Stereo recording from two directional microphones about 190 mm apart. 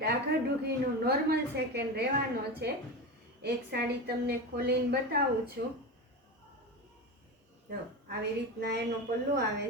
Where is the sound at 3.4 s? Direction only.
55° right (ahead or behind).